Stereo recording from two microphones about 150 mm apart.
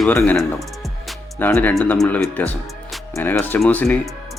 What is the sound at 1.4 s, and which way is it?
Speech, 10° left (ahead or behind).